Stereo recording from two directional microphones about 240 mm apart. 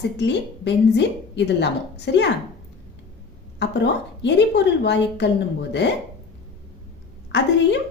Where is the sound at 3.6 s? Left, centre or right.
Left.